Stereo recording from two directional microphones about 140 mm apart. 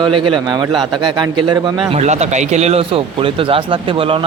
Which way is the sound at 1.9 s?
55° right (ahead or behind).